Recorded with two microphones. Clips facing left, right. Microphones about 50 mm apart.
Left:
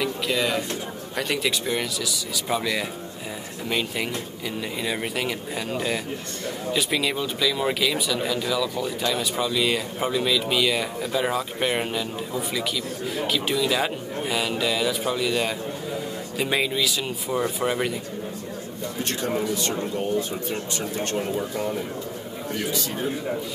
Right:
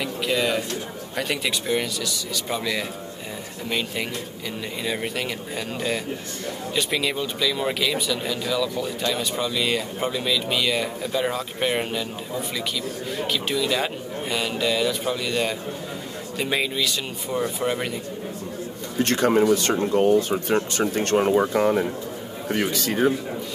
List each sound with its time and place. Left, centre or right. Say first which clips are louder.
0.0 s speech: right 1 dB; centre
4.8 s speech: right 1 dB; centre
19.0 s a man's voice: right 8 dB; right